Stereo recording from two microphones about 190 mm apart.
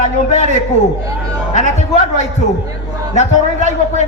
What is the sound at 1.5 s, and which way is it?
A man's voice, 35° left (ahead or behind).